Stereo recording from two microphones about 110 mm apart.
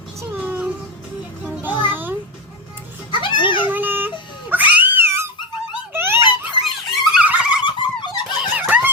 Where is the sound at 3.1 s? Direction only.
50° left (ahead or behind).